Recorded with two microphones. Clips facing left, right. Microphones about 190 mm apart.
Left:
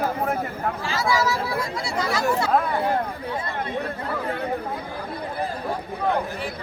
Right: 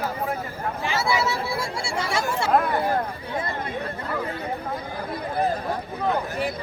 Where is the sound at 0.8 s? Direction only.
25° right (ahead or behind).